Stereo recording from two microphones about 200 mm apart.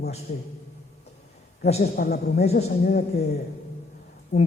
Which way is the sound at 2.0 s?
50° left (ahead or behind).